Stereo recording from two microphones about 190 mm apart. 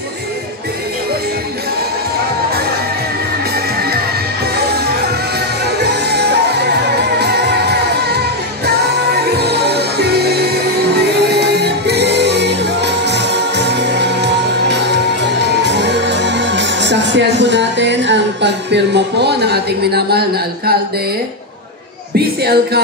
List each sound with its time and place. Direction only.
4.6 s music: 60° right (ahead or behind)
22.1 s speech: 55° right (ahead or behind)